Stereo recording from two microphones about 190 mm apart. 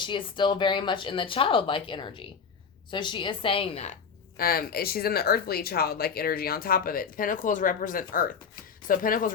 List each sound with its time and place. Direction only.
0.0 s speech: 25° left (ahead or behind)
4.4 s speech: 50° left (ahead or behind)